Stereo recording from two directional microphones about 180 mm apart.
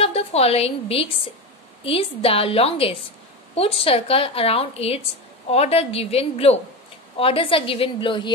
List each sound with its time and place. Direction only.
0.0 s a woman's voice: 35° left (ahead or behind)